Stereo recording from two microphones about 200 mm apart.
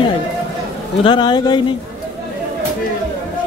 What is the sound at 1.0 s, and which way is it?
Speech, 20° left (ahead or behind).